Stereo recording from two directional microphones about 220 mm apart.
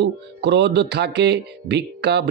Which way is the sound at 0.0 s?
50° right (ahead or behind).